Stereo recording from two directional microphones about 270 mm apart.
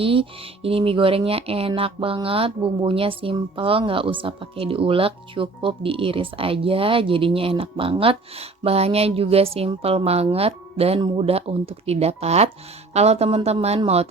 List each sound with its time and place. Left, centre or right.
0.0 s speech: centre